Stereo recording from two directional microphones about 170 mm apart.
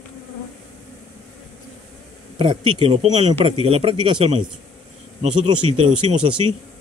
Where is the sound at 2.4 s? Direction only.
30° right (ahead or behind).